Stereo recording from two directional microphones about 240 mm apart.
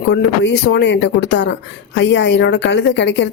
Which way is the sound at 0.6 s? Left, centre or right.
Left.